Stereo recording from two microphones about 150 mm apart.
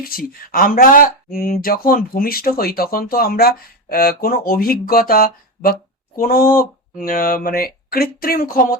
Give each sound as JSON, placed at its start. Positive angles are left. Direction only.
{"t": 0.0, "sound": "speech", "side_deg": 75}